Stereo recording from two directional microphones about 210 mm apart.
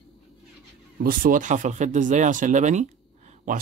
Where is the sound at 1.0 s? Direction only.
40° right (ahead or behind).